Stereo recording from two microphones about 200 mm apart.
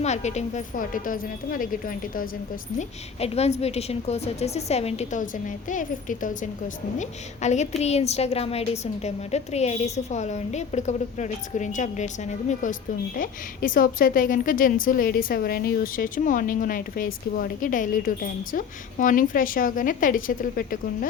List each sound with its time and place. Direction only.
0.0 s a woman's voice: 35° left (ahead or behind)
2.7 s a woman's voice: 30° left (ahead or behind)